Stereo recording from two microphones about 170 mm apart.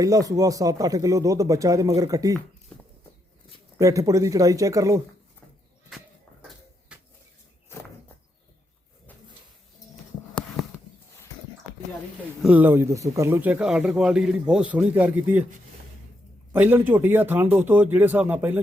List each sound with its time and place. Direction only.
0.0 s speech: 20° right (ahead or behind)
2.7 s a sound: 5° left (ahead or behind)
3.8 s speech: 20° right (ahead or behind)
6.9 s a sound: 5° right (ahead or behind)
12.4 s speech: 10° right (ahead or behind)
16.5 s speech: 10° right (ahead or behind)